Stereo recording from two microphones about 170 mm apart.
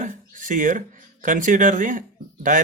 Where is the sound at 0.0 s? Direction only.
50° right (ahead or behind).